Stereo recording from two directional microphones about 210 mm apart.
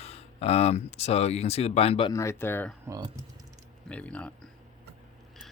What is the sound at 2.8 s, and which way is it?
Speech, 15° right (ahead or behind).